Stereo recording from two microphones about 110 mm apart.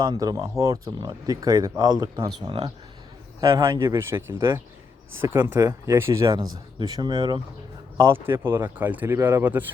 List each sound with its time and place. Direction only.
0.0 s speech: 35° right (ahead or behind)
3.4 s speech: 25° right (ahead or behind)
6.3 s speech: 45° right (ahead or behind)
7.9 s speech: 20° right (ahead or behind)